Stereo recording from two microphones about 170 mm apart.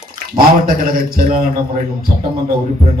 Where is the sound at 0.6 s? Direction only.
55° right (ahead or behind).